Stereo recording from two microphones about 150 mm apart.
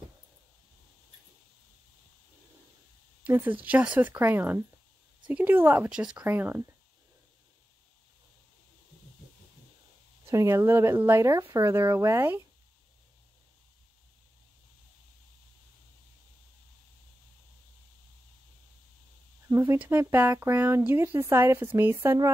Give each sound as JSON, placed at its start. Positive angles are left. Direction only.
{"t": 3.3, "sound": "speech", "side_deg": -15}
{"t": 10.2, "sound": "speech", "side_deg": -20}
{"t": 19.5, "sound": "speech", "side_deg": -15}